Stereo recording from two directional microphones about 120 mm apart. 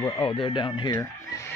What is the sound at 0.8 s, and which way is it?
Speech, 35° left (ahead or behind).